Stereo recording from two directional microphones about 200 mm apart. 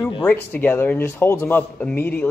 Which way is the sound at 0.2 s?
10° left (ahead or behind).